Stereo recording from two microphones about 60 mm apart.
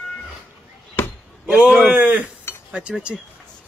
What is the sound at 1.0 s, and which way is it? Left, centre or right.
Chop, left.